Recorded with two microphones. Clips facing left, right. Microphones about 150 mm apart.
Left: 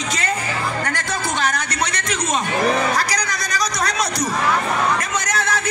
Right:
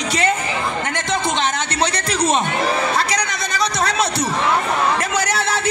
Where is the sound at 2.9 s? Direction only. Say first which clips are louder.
Right 2 dB; 25° right (ahead or behind).